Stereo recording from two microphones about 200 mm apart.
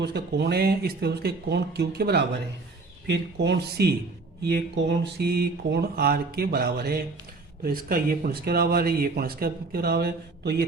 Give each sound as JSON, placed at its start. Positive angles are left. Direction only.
{"t": 0.0, "sound": "speech", "side_deg": -55}